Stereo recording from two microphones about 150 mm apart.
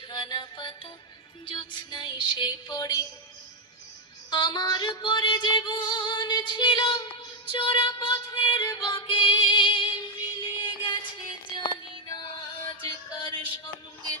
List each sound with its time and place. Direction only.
0.1 s music: 30° left (ahead or behind)
4.3 s female singing: 30° left (ahead or behind)
10.6 s music: 30° left (ahead or behind)